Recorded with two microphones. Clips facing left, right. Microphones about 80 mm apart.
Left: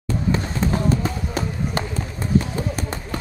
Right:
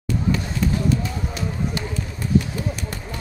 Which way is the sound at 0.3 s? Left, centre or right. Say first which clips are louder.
Left 1 dB; left.